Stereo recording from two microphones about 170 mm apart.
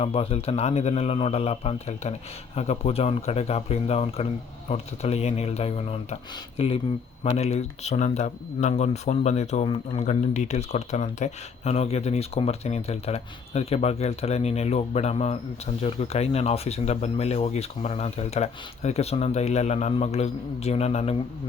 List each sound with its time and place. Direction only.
0.0 s speech: 35° left (ahead or behind)